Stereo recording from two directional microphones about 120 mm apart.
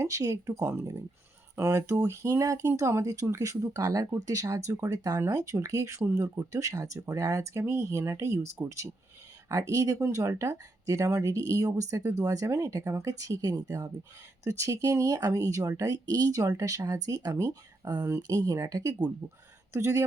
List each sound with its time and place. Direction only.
0.0 s speech: 30° right (ahead or behind)